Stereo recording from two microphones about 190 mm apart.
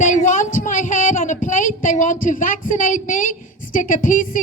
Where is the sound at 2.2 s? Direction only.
45° left (ahead or behind).